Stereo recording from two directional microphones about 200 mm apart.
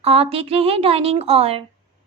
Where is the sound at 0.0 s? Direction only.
30° right (ahead or behind).